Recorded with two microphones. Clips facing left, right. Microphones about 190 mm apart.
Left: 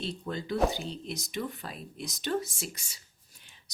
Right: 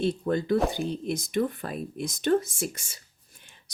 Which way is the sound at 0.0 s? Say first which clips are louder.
Right 10 dB; 55° right (ahead or behind).